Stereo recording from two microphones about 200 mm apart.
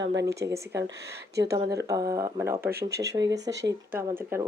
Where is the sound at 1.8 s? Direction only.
15° right (ahead or behind).